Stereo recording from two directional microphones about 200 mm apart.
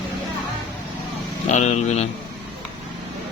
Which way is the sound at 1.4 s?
35° left (ahead or behind).